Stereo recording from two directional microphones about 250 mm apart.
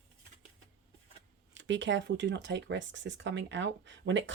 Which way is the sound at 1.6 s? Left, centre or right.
Right.